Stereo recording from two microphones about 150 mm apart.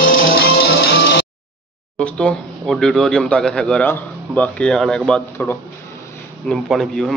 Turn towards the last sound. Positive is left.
turn(degrees=5)  # may be behind; listen again after turning